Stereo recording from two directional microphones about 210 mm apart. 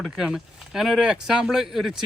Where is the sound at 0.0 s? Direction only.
Centre (ahead or behind).